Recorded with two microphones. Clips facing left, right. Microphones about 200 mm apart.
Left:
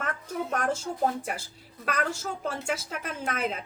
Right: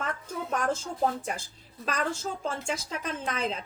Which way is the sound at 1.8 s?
60° left (ahead or behind).